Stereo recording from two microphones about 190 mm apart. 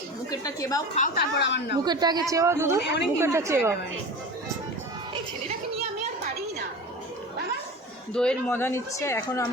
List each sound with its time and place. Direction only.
0.3 s speech: 20° left (ahead or behind)
0.9 s a woman's voice: 50° left (ahead or behind); by 1.6 s 65° left (ahead or behind)
1.7 s a woman's voice: 20° right (ahead or behind)
8.1 s speech: 5° left (ahead or behind)